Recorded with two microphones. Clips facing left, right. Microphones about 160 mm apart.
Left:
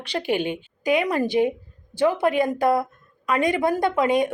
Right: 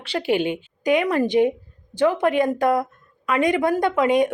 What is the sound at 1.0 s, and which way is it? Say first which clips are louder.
A woman's voice: right 3 dB; 10° left (ahead or behind).